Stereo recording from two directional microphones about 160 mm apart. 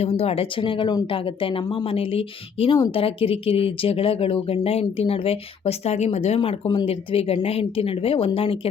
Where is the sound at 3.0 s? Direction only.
35° left (ahead or behind).